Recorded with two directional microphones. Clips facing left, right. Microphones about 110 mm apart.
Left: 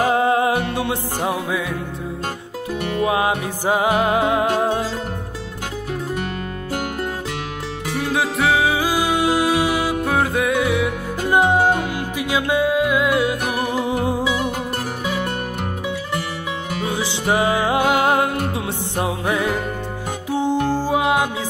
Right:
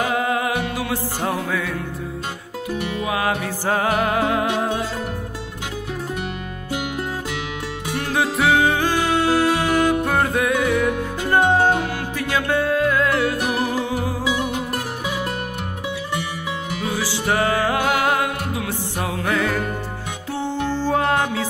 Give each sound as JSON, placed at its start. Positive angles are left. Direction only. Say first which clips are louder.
{"t": 0.0, "sound": "music", "louder": "left 4 dB", "side_deg": 30}
{"t": 1.2, "sound": "music", "louder": "left 2 dB", "side_deg": 15}
{"t": 2.8, "sound": "music", "louder": "left 7 dB", "side_deg": 45}
{"t": 3.1, "sound": "music", "louder": "left 1 dB", "side_deg": 20}
{"t": 8.0, "sound": "music", "louder": "even", "side_deg": 0}
{"t": 16.8, "sound": "music", "louder": "left 1 dB", "side_deg": 20}
{"t": 20.5, "sound": "music", "louder": "left 2 dB", "side_deg": 45}
{"t": 20.8, "sound": "music", "louder": "left 1 dB", "side_deg": 10}